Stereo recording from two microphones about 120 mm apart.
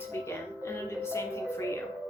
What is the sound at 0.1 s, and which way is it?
A woman's voice, 20° left (ahead or behind).